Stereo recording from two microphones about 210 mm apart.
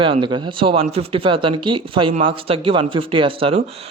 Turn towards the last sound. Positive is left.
turn(degrees=-25)  # may be behind; listen again after turning